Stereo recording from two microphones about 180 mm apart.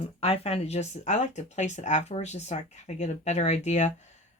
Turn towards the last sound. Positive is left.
turn(degrees=40)  # may be behind; listen again after turning